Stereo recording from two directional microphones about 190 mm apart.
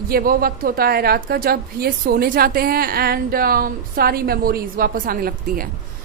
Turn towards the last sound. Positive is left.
turn(degrees=-50)  # may be behind; listen again after turning